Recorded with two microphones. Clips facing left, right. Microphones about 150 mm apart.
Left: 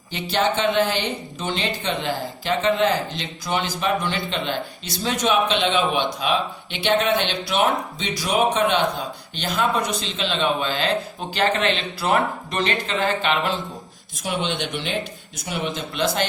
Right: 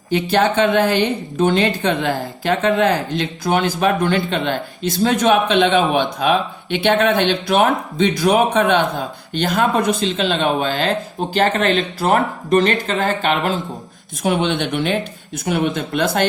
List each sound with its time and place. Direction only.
0.1 s a woman's voice: 55° right (ahead or behind)
14.2 s a woman's voice: 55° right (ahead or behind)